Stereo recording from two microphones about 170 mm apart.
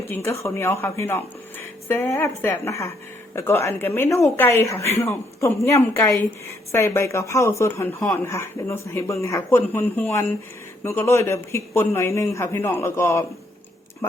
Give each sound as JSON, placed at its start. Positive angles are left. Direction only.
{"t": 0.1, "sound": "a woman's voice", "side_deg": 15}